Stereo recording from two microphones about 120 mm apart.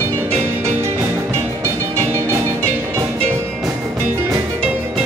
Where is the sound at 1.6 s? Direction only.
20° right (ahead or behind).